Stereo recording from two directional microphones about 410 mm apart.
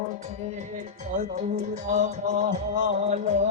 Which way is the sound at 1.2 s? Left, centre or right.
Centre.